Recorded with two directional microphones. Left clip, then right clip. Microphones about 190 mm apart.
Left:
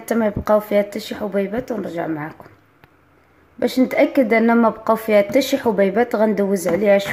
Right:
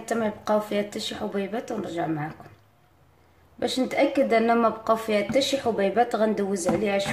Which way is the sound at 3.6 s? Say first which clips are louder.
Left 7 dB; 40° left (ahead or behind).